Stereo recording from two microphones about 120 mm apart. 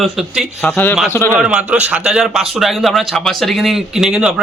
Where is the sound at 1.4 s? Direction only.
10° right (ahead or behind).